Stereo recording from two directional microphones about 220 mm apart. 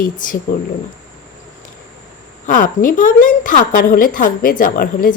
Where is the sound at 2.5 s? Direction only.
40° left (ahead or behind).